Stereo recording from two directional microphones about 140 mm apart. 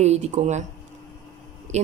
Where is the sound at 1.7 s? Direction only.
55° right (ahead or behind).